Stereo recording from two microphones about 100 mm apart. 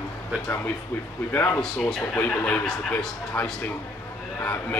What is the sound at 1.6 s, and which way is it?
Speech, 5° left (ahead or behind).